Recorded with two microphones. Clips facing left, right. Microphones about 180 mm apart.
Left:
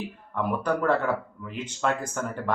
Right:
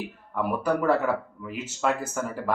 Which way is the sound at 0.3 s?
5° right (ahead or behind).